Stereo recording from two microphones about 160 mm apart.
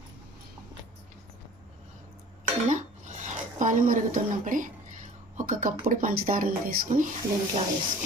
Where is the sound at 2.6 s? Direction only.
50° right (ahead or behind).